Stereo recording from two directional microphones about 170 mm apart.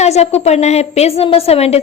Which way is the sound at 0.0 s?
40° left (ahead or behind).